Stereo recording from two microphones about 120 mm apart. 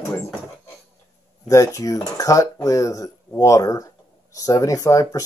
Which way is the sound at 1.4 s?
25° left (ahead or behind).